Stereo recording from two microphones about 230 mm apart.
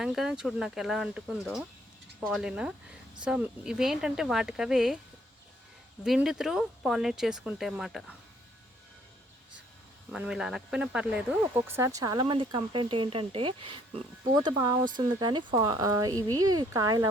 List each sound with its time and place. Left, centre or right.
0.0 s speech: centre
6.0 s speech: centre
10.1 s speech: centre